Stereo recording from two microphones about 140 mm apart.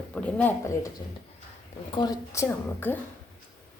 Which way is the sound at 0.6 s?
20° left (ahead or behind).